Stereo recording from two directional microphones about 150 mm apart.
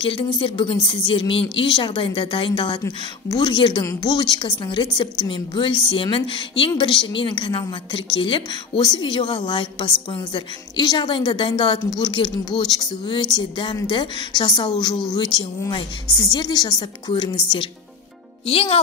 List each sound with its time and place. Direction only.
0.0 s a woman's voice: 35° left (ahead or behind)